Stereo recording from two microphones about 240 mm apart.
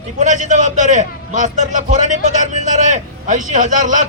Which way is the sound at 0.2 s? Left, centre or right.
Right.